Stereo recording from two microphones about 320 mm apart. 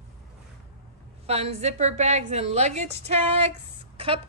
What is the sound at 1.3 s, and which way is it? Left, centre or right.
A woman's voice, centre.